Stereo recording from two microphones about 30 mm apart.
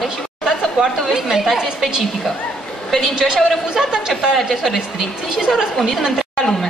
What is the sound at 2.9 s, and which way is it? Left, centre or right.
Speech, centre.